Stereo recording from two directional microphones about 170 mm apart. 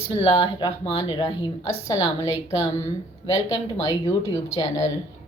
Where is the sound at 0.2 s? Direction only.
35° left (ahead or behind).